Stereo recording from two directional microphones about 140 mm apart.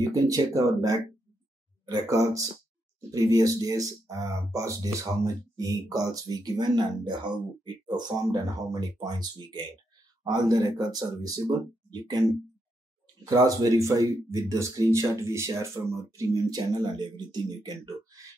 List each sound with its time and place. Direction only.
0.0 s speech: 25° right (ahead or behind)